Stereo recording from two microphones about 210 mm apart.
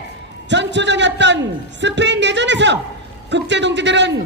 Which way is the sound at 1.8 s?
55° right (ahead or behind).